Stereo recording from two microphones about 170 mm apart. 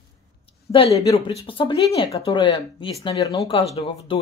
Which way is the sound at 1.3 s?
30° left (ahead or behind).